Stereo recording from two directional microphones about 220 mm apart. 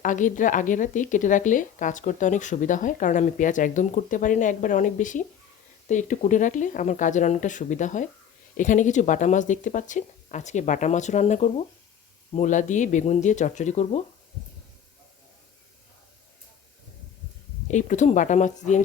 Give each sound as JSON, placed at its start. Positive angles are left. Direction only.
{"t": 0.0, "sound": "speech", "side_deg": 35}
{"t": 17.7, "sound": "speech", "side_deg": 35}